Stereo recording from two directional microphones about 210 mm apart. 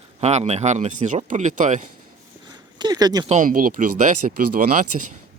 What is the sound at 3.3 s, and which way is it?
Speech, 35° right (ahead or behind).